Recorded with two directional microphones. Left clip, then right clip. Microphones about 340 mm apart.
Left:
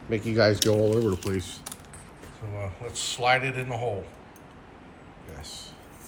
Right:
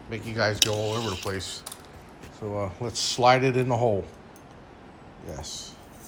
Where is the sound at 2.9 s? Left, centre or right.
Centre.